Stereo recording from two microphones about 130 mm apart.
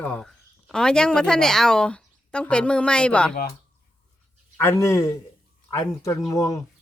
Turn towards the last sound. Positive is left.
turn(degrees=25)  # may be behind; listen again after turning